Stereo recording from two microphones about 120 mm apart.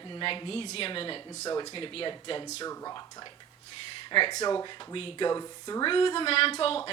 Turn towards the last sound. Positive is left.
turn(degrees=50)  # may be behind; listen again after turning